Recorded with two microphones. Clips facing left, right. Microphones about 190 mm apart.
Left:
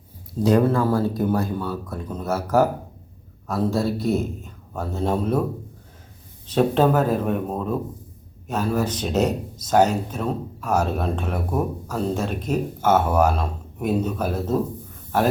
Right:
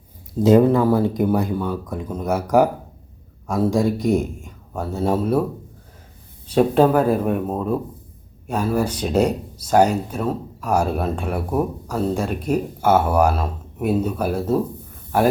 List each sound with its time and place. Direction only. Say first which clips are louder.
0.4 s speech: right 4 dB; 20° right (ahead or behind)
6.5 s speech: right 3 dB; 10° right (ahead or behind)